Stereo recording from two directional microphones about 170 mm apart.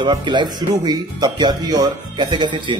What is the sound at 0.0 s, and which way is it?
Speech, 25° right (ahead or behind).